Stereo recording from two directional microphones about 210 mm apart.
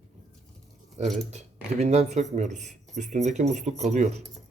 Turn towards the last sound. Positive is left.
turn(degrees=-35)  # may be behind; listen again after turning